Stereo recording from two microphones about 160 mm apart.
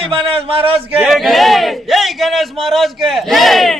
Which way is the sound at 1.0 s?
Centre (ahead or behind).